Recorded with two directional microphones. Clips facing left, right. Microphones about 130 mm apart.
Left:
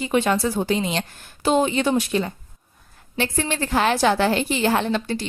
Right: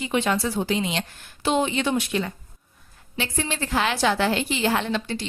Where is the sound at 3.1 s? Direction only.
55° left (ahead or behind).